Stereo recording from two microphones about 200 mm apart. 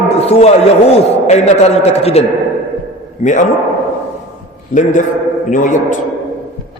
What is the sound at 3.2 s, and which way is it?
Speech, 40° left (ahead or behind).